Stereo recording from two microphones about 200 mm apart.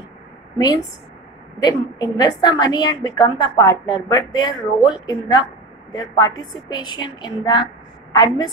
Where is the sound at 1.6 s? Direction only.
20° left (ahead or behind).